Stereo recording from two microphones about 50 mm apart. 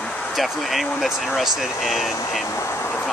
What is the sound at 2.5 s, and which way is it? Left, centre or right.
Speech, left.